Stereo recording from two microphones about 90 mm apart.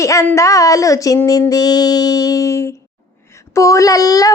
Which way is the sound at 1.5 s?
50° left (ahead or behind).